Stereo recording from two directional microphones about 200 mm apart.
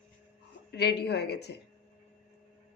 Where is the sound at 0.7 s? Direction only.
55° left (ahead or behind).